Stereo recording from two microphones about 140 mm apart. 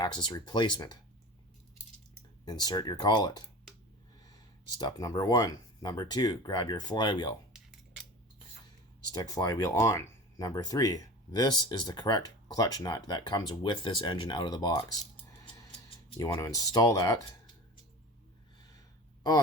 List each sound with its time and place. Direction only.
0.0 s speech: 30° left (ahead or behind)
2.4 s speech: 30° left (ahead or behind)
4.8 s speech: 30° left (ahead or behind)
9.1 s speech: 25° left (ahead or behind)
16.4 s speech: 25° left (ahead or behind)